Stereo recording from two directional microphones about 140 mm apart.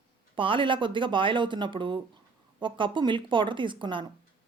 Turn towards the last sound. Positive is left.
turn(degrees=-35)  # may be behind; listen again after turning